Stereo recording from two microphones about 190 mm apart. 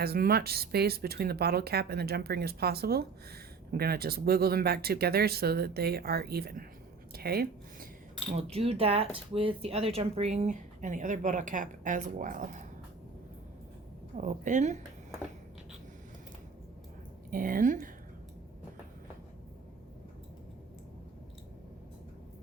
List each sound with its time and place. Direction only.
0.0 s speech: 55° right (ahead or behind)
7.1 s a sound: 55° right (ahead or behind)
8.4 s speech: 30° right (ahead or behind)
14.2 s speech: 40° right (ahead or behind)
17.3 s a woman's voice: 50° right (ahead or behind)